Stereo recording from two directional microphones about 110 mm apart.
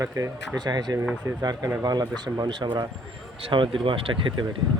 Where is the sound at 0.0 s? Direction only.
25° right (ahead or behind).